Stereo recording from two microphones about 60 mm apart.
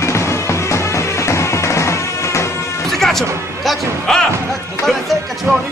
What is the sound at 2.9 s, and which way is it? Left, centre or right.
Music, centre.